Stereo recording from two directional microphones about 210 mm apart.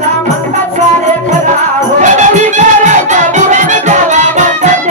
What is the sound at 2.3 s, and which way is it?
Music, 35° right (ahead or behind).